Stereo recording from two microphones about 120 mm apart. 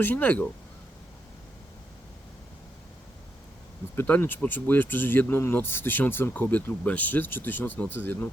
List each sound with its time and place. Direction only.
0.0 s speech: 15° left (ahead or behind)
3.9 s speech: 15° left (ahead or behind)